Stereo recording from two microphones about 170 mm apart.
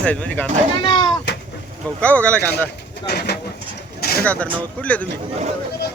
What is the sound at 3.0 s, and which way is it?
Speech, 70° left (ahead or behind).